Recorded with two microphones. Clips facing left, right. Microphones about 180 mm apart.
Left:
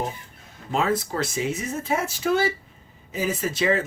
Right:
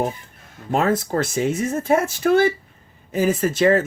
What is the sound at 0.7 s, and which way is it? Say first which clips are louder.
Speech: right 4 dB; 50° right (ahead or behind).